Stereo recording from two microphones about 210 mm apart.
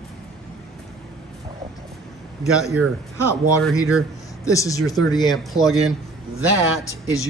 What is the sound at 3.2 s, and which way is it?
Speech, 15° left (ahead or behind).